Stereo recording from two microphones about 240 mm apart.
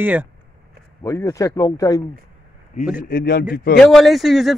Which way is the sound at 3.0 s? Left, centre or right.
Left.